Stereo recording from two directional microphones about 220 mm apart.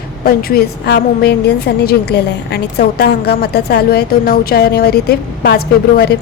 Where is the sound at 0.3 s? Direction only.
45° left (ahead or behind).